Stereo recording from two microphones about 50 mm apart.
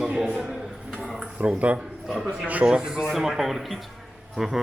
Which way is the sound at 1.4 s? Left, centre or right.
Right.